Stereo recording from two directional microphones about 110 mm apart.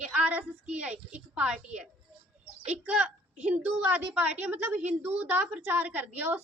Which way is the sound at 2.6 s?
10° right (ahead or behind).